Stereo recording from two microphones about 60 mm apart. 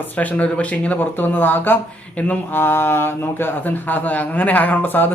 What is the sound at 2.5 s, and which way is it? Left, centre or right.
A man's voice, left.